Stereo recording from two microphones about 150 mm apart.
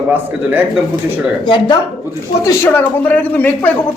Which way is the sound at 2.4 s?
20° left (ahead or behind).